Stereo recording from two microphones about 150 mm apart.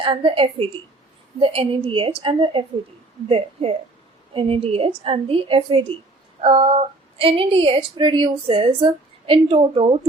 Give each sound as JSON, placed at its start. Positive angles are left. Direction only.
{"t": 0.0, "sound": "speech", "side_deg": -35}